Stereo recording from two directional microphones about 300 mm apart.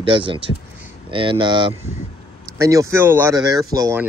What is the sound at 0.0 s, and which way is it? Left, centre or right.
Speech, centre.